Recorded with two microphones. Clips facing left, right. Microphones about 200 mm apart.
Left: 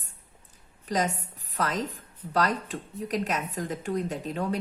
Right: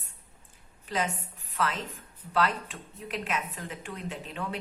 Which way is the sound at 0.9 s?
40° left (ahead or behind).